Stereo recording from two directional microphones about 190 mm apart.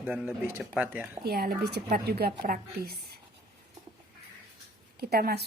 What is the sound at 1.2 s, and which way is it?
A woman's voice, 55° right (ahead or behind).